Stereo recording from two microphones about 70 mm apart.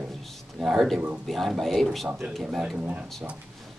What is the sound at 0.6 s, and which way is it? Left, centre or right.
Speech, centre.